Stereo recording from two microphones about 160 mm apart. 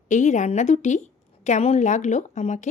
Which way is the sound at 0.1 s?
50° left (ahead or behind).